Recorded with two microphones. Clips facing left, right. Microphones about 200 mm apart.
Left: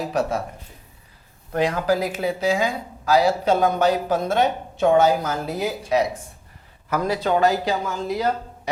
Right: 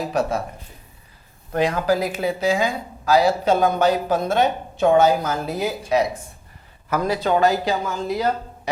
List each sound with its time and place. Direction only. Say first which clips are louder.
0.0 s speech: right 1 dB; 25° right (ahead or behind)
1.5 s speech: right 1 dB; 20° right (ahead or behind)